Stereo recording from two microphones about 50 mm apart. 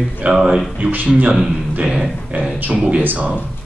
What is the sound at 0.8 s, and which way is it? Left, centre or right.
Speech, right.